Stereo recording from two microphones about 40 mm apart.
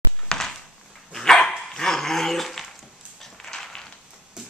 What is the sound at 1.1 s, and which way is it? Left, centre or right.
Dog, centre.